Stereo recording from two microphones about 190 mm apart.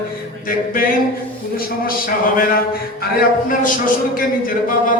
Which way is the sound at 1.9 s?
45° left (ahead or behind).